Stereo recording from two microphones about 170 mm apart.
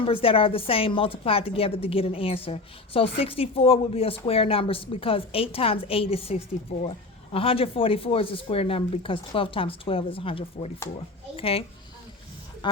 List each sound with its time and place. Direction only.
0.0 s a woman's voice: 30° left (ahead or behind)
12.6 s speech: 25° left (ahead or behind)